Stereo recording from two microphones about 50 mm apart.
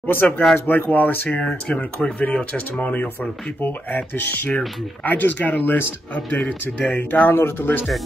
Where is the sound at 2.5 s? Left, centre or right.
Left.